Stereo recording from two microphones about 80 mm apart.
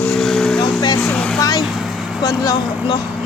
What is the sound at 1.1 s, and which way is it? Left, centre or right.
Vehicle, centre.